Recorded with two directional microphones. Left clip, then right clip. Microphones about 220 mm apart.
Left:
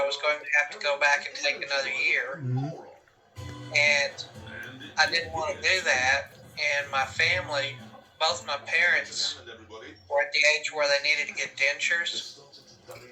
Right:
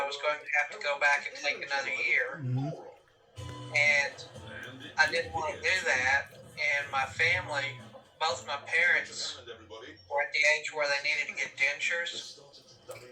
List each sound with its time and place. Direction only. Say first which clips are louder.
0.1 s a man's voice: left 5 dB; 45° left (ahead or behind)
3.7 s a man's voice: left 3 dB; 45° left (ahead or behind)